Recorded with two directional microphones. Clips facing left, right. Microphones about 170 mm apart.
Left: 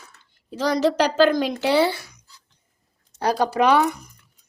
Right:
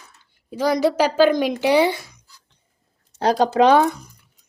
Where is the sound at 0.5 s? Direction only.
10° right (ahead or behind).